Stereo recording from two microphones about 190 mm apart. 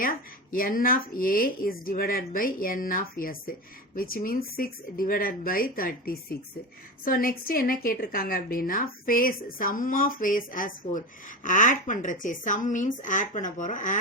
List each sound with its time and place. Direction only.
0.0 s a woman's voice: 50° left (ahead or behind)